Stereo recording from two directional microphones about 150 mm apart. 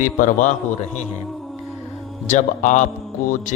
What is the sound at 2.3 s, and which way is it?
Speech, 55° left (ahead or behind).